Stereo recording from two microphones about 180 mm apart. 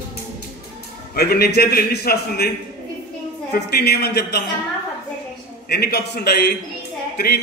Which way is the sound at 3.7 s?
60° left (ahead or behind).